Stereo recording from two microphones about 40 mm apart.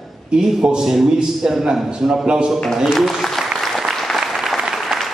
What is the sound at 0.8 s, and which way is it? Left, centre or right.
A man's voice, centre.